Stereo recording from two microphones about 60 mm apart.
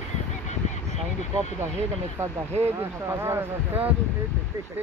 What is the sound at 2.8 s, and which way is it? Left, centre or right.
Speech, right.